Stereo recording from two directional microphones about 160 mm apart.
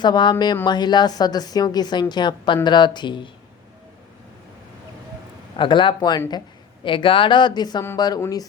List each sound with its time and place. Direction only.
0.0 s a woman's voice: 30° left (ahead or behind)
5.5 s a woman's voice: 30° left (ahead or behind)